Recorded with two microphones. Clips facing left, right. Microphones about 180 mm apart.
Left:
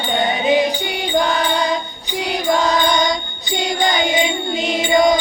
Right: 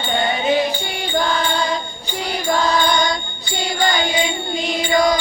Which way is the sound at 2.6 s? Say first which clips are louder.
Left 1 dB; 20° left (ahead or behind).